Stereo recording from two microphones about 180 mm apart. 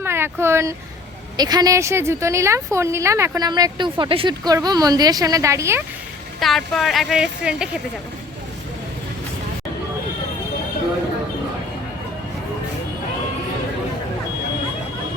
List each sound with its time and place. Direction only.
0.0 s a woman's voice: 15° right (ahead or behind)
6.4 s a woman's voice: centre (ahead or behind)